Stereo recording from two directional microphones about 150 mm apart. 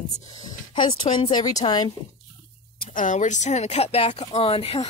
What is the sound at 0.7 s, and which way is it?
Speech, 35° left (ahead or behind).